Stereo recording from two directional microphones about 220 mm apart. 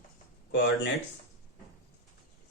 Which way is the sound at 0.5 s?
55° left (ahead or behind).